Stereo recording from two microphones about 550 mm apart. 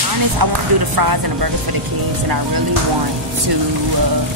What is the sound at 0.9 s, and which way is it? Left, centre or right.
Speech, right.